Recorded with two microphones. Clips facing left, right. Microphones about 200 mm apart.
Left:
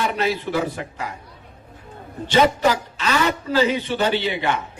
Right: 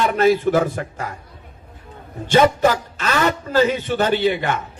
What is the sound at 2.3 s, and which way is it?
A man's voice, 50° right (ahead or behind).